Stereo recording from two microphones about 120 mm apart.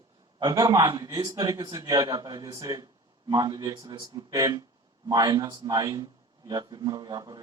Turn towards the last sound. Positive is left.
turn(degrees=-35)  # may be behind; listen again after turning